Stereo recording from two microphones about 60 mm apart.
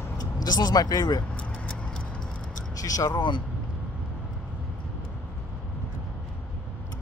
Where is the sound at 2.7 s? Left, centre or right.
Left.